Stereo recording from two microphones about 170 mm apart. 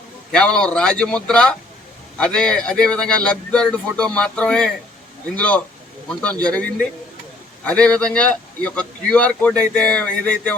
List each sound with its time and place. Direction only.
0.3 s speech: 5° left (ahead or behind)